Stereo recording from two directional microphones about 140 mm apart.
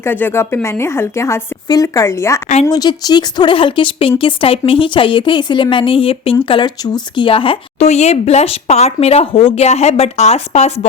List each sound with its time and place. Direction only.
0.0 s a woman's voice: 15° left (ahead or behind); by 10.7 s 50° left (ahead or behind)